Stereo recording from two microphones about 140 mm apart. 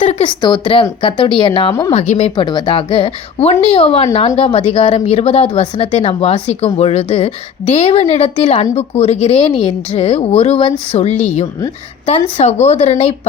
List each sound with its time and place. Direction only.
0.2 s a woman's voice: 35° left (ahead or behind)
2.3 s a woman's voice: 30° left (ahead or behind); by 13.1 s 50° left (ahead or behind)